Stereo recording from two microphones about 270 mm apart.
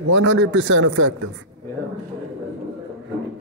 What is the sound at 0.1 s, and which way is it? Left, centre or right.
A man's voice, right.